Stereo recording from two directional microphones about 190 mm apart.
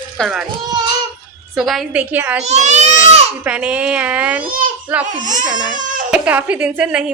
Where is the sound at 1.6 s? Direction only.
Centre (ahead or behind).